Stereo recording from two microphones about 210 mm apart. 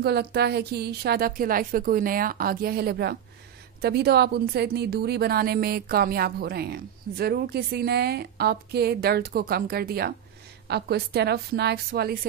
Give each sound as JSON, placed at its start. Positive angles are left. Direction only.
{"t": 0.0, "sound": "a woman's voice", "side_deg": -50}